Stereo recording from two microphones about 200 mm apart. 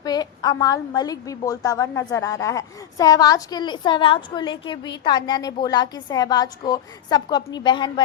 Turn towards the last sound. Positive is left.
turn(degrees=20)  # may be behind; listen again after turning